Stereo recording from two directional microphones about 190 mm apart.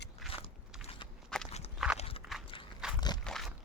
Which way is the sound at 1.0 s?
25° left (ahead or behind).